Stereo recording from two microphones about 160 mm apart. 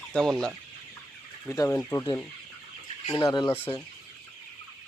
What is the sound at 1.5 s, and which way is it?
Speech, 20° left (ahead or behind).